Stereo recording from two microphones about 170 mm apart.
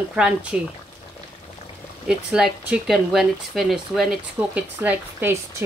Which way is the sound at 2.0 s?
5° right (ahead or behind).